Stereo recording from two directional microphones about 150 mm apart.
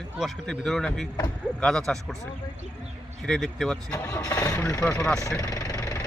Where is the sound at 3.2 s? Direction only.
5° left (ahead or behind).